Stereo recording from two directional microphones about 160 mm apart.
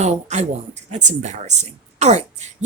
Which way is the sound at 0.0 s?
45° right (ahead or behind).